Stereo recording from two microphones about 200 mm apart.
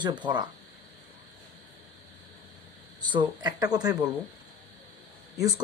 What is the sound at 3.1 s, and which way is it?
Speech, 20° right (ahead or behind).